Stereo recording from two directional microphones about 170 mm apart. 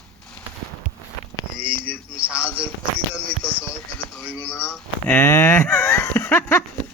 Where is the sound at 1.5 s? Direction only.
30° right (ahead or behind).